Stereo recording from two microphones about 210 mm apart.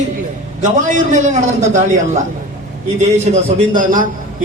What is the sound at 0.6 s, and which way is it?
A man's voice, 35° right (ahead or behind).